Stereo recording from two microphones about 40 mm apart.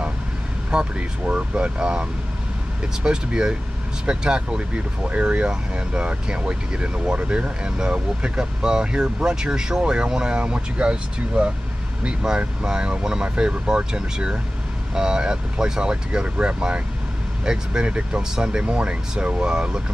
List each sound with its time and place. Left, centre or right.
0.7 s speech: right
1.8 s speech: centre
4.6 s speech: right